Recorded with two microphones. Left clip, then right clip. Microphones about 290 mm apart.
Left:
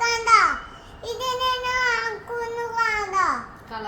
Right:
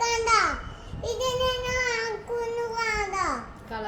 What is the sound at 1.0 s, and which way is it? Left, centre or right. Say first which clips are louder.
Child singing: left 1 dB; centre.